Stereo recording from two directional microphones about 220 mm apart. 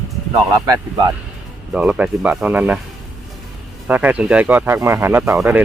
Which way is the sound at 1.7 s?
5° right (ahead or behind).